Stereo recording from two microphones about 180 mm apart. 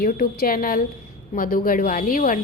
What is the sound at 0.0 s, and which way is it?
A woman's voice, 55° left (ahead or behind).